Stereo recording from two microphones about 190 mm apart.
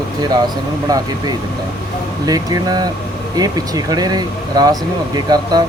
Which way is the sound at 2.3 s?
20° right (ahead or behind).